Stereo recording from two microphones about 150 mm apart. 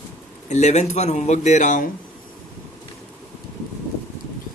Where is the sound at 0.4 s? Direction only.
50° left (ahead or behind).